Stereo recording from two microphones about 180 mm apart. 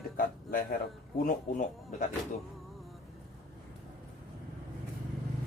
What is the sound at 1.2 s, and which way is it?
Speech, 50° left (ahead or behind).